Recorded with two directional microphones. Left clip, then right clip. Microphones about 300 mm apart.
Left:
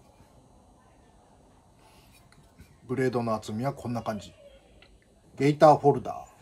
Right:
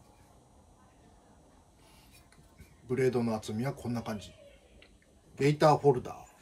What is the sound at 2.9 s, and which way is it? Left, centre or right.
Speech, centre.